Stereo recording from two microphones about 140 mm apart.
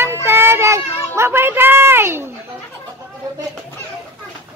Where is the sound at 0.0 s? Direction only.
15° right (ahead or behind).